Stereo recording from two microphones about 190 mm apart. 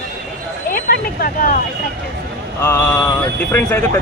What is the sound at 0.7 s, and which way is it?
Speech, 50° left (ahead or behind).